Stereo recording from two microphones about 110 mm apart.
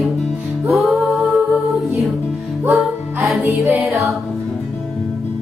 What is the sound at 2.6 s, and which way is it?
Music, 20° right (ahead or behind).